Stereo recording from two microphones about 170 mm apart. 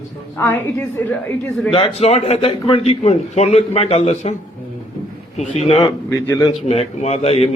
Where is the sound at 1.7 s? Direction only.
35° left (ahead or behind).